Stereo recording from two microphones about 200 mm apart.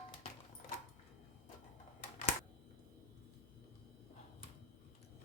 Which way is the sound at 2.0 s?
40° left (ahead or behind).